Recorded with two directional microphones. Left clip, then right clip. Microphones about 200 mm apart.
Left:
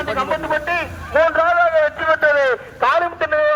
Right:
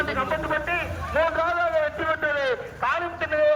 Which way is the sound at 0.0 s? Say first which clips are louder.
Left 5 dB; 30° left (ahead or behind).